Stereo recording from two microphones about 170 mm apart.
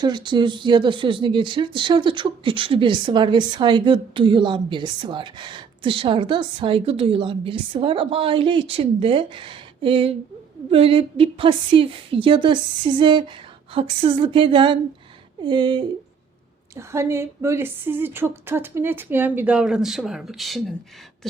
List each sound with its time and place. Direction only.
0.0 s a woman's voice: 25° right (ahead or behind)
16.7 s a woman's voice: 15° right (ahead or behind); by 20.7 s centre (ahead or behind)